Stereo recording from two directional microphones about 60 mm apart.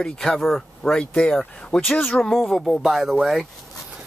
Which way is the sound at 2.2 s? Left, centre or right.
Centre.